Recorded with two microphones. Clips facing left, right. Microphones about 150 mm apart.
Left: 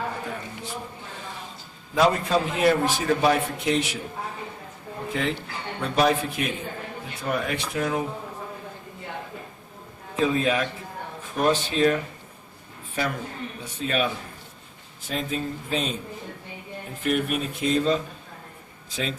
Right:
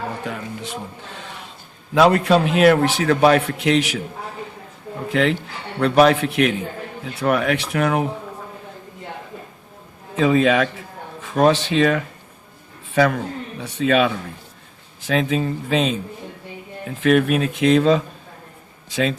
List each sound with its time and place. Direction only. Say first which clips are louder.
0.3 s a man's voice: right 5 dB; 75° right (ahead or behind)
2.0 s a man's voice: right 6 dB; 70° right (ahead or behind)
5.1 s a man's voice: right 9 dB; 75° right (ahead or behind)
10.2 s a man's voice: right 7 dB; 85° right
17.0 s speech: right 9 dB; 90° right